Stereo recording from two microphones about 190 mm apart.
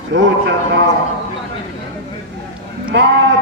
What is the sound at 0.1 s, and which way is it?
Speech, 65° right (ahead or behind).